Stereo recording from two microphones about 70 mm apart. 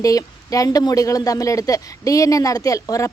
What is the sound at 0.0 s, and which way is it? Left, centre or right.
Speech, left.